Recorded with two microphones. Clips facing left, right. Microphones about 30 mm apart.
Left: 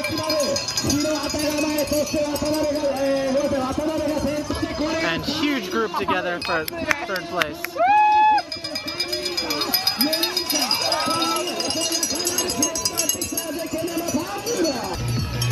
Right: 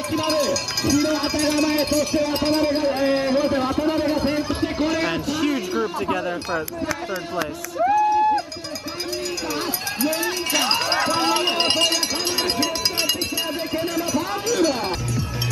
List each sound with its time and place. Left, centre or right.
0.8 s a man's voice: right
1.4 s speech: right
2.1 s a sound: right
4.7 s a sound: centre
5.9 s speech: left
7.8 s run: left
10.5 s run: right
11.2 s run: right